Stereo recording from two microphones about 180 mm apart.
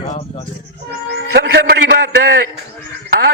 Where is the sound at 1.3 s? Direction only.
70° right (ahead or behind).